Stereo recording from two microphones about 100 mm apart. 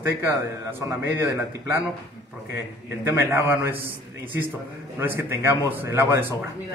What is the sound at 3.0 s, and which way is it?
Speech, 20° right (ahead or behind).